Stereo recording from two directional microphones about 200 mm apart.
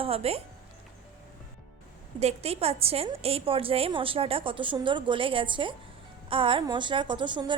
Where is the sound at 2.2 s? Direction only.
30° right (ahead or behind).